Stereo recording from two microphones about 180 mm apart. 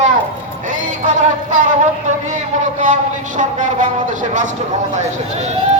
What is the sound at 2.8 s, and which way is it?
A man's voice, 45° right (ahead or behind).